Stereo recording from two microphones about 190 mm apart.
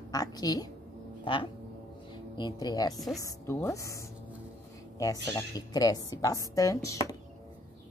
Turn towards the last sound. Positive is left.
turn(degrees=15)  # may be behind; listen again after turning